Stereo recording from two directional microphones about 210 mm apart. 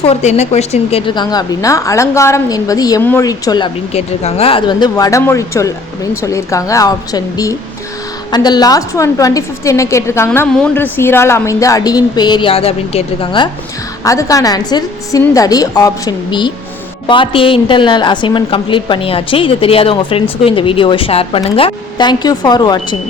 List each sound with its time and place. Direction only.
0.0 s a woman's voice: 30° left (ahead or behind)